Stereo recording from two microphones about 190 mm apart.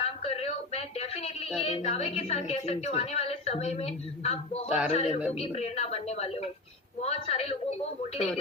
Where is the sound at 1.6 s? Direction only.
30° left (ahead or behind).